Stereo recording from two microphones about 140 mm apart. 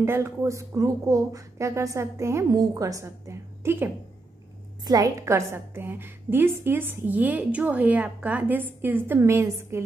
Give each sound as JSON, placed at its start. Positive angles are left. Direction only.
{"t": 0.0, "sound": "a woman's voice", "side_deg": -15}